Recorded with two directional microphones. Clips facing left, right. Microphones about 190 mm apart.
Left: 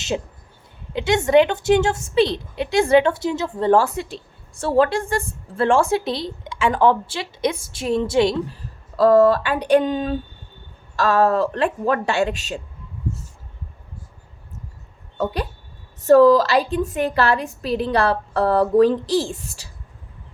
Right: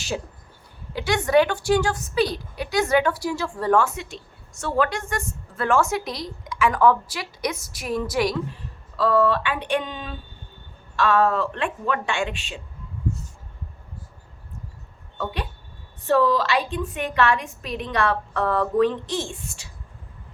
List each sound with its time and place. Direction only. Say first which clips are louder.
0.9 s a woman's voice: left 4 dB; 20° left (ahead or behind)
9.0 s a woman's voice: left 7 dB; 40° left (ahead or behind)
15.2 s a woman's voice: left 6 dB; 40° left (ahead or behind)